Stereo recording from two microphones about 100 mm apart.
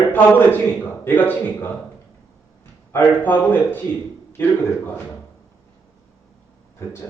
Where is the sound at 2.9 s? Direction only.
20° left (ahead or behind).